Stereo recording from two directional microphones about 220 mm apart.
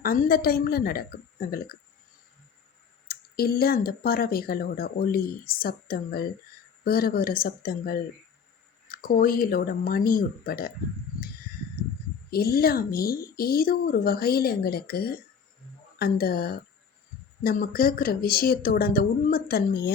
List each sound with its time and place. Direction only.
0.0 s speech: 40° left (ahead or behind)
3.1 s speech: 45° left (ahead or behind)
12.3 s speech: 45° left (ahead or behind)